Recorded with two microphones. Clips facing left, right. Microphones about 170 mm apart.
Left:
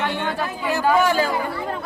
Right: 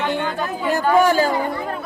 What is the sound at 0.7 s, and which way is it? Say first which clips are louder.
Speech: right 3 dB; 45° right (ahead or behind).